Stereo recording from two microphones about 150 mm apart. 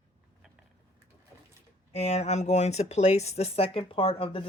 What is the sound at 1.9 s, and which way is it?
Speech, 45° left (ahead or behind).